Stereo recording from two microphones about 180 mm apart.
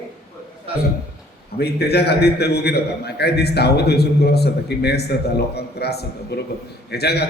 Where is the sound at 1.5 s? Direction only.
65° left (ahead or behind).